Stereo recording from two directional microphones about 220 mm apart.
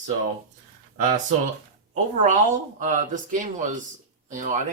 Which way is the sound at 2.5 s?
35° right (ahead or behind).